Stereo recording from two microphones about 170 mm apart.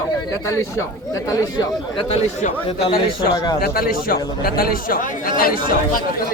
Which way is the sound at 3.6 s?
60° left (ahead or behind).